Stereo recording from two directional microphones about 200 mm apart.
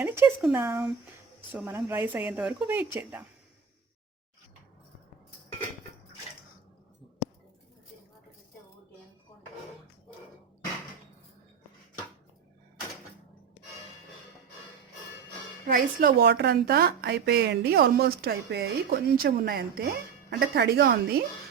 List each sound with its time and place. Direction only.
0.0 s speech: 10° right (ahead or behind)
15.6 s speech: 45° right (ahead or behind)